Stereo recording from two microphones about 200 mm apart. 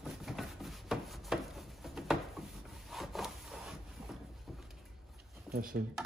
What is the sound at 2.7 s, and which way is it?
Wood, centre (ahead or behind).